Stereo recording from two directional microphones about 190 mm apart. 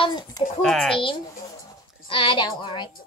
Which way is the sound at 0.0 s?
25° left (ahead or behind).